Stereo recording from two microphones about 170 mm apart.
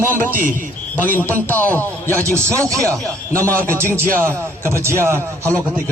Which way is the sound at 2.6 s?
20° right (ahead or behind).